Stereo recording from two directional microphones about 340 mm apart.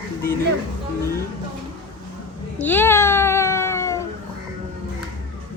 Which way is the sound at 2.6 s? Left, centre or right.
Centre.